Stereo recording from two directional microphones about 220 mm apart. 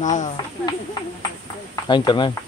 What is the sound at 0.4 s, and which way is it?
Speech, 20° left (ahead or behind).